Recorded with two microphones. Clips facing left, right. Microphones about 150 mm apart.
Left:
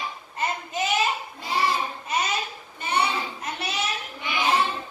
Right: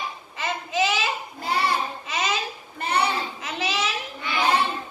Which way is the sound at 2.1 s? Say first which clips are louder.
Left 1 dB; 90° right.